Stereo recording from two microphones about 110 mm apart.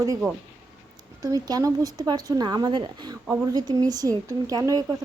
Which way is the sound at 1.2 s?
35° right (ahead or behind).